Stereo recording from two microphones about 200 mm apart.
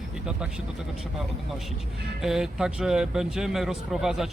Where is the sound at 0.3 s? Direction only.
5° right (ahead or behind).